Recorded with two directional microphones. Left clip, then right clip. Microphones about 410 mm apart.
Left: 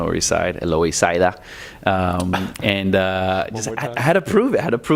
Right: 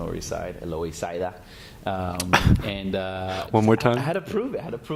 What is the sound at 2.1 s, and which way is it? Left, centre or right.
Speech, right.